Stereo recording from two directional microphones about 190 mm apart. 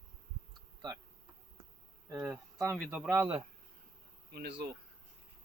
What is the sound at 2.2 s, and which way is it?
Speech, 15° right (ahead or behind).